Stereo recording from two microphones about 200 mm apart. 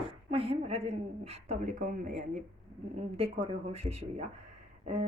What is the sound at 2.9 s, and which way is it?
Speech, 30° right (ahead or behind).